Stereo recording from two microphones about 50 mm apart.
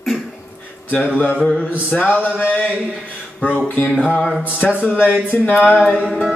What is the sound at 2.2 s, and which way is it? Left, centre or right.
Speech, left.